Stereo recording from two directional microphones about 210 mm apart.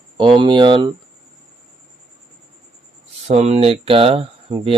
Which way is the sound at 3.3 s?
30° right (ahead or behind).